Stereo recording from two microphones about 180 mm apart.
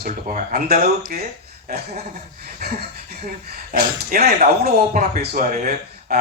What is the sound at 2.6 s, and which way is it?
Speech, 55° right (ahead or behind).